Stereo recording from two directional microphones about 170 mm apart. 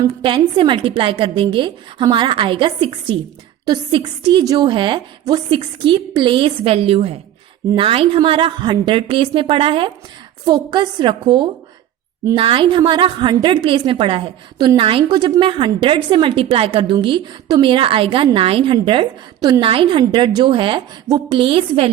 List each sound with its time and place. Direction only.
0.0 s a woman's voice: 25° right (ahead or behind)